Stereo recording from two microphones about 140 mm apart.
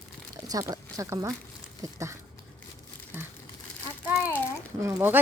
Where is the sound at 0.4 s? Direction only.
25° right (ahead or behind).